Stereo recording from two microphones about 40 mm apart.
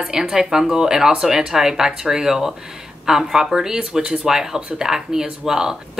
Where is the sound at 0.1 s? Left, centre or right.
Centre.